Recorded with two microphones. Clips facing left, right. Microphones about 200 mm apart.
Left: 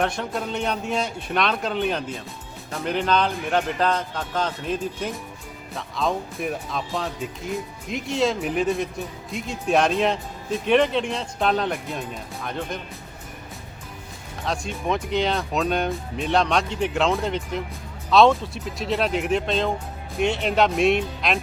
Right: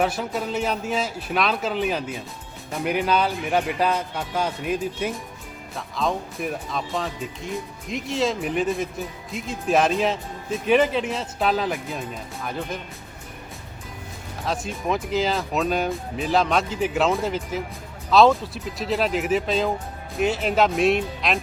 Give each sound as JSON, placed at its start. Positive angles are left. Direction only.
{"t": 0.0, "sound": "speech", "side_deg": -5}
{"t": 14.4, "sound": "speech", "side_deg": -5}